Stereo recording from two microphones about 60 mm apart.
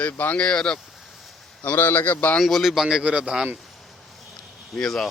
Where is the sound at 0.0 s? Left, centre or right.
Left.